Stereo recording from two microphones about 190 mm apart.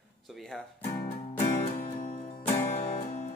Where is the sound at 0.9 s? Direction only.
40° left (ahead or behind).